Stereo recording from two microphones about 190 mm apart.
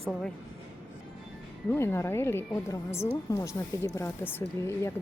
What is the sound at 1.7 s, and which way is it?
A woman's voice, 15° left (ahead or behind).